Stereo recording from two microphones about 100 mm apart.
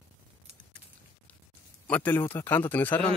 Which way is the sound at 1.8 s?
15° left (ahead or behind).